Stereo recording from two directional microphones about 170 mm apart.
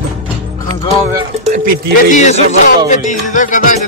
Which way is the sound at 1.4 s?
45° right (ahead or behind).